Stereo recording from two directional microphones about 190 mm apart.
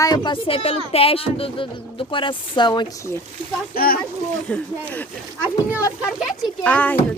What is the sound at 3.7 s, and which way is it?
Speech, 50° left (ahead or behind).